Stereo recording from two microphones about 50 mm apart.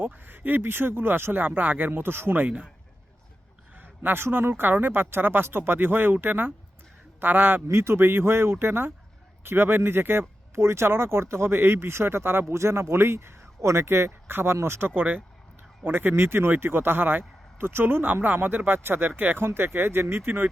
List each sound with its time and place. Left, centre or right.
0.0 s a man's voice: right
1.9 s a man's voice: right
3.8 s a sound: right
4.2 s a man's voice: right
7.7 s a man's voice: right
13.8 s a man's voice: right